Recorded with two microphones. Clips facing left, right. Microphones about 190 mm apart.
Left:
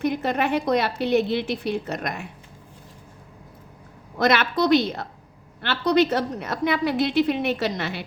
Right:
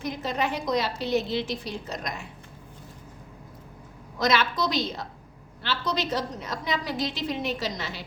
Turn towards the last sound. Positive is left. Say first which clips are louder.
# left 6 dB
turn(degrees=60)  # may be behind; listen again after turning